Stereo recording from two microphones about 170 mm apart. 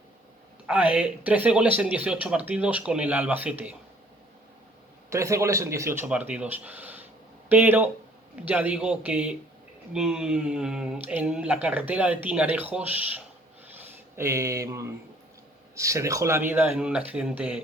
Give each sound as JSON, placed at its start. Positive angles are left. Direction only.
{"t": 0.7, "sound": "speech", "side_deg": -10}
{"t": 5.0, "sound": "speech", "side_deg": -15}